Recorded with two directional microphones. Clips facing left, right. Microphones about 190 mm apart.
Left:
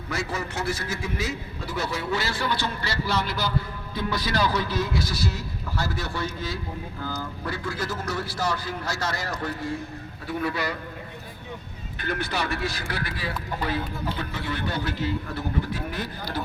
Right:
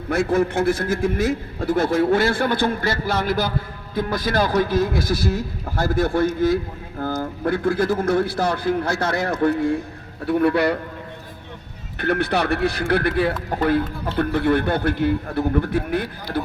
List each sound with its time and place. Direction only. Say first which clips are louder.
0.1 s a man's voice: right 11 dB; 55° right (ahead or behind)
11.9 s speech: right 8 dB; 60° right (ahead or behind)